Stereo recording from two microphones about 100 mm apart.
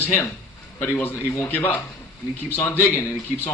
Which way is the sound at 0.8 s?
20° left (ahead or behind).